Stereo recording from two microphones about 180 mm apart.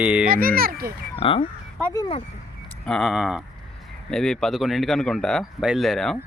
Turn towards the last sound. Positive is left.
turn(degrees=0)  # may be behind; listen again after turning